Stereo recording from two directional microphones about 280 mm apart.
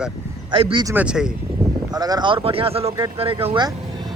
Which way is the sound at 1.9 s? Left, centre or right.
Centre.